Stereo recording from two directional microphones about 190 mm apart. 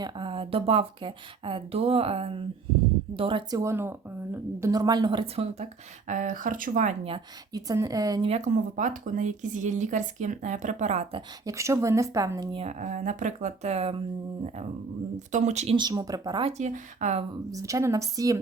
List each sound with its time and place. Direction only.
0.0 s speech: 25° right (ahead or behind)
7.5 s speech: 20° right (ahead or behind)
8.3 s speech: 40° right (ahead or behind)
11.4 s speech: 15° right (ahead or behind)
12.6 s speech: 40° right (ahead or behind)
15.3 s speech: 40° right (ahead or behind)
15.7 s speech: 20° right (ahead or behind)
16.5 s speech: 40° right (ahead or behind)
17.5 s speech: 15° right (ahead or behind)